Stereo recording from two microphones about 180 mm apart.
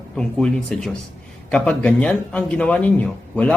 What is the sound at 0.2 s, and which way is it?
A man's voice, 5° left (ahead or behind).